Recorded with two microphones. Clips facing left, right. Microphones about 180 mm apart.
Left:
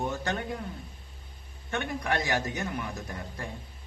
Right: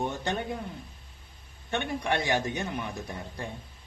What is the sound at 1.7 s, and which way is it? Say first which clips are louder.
A man's voice: right 1 dB; 25° right (ahead or behind).